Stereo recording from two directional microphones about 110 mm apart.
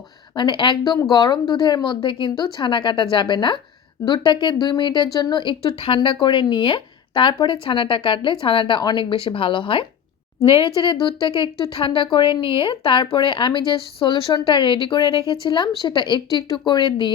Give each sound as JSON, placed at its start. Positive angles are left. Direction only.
{"t": 0.3, "sound": "a woman's voice", "side_deg": 45}